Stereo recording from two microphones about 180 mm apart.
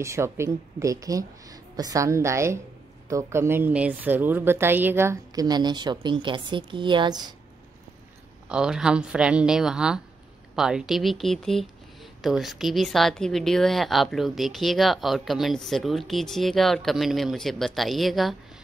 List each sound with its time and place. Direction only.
0.0 s a woman's voice: 15° right (ahead or behind)
8.5 s speech: 5° right (ahead or behind)